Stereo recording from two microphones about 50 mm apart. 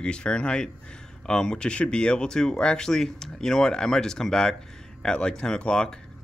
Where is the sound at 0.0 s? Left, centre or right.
Centre.